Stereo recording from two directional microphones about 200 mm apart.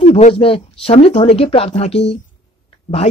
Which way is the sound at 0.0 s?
30° left (ahead or behind).